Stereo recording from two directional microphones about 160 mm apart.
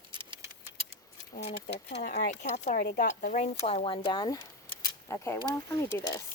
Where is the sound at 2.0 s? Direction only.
70° left (ahead or behind).